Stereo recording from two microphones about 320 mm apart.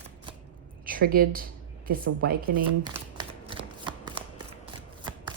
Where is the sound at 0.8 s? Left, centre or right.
Right.